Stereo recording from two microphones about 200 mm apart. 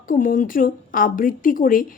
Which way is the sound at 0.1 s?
40° left (ahead or behind).